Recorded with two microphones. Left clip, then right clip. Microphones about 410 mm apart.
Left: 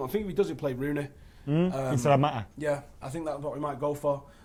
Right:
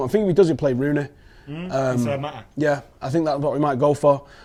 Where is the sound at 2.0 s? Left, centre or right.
Left.